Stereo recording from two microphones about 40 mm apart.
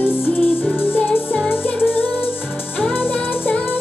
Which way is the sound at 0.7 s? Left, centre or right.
Left.